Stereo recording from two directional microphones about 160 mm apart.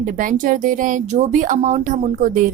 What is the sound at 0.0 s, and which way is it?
A woman's voice, 55° right (ahead or behind).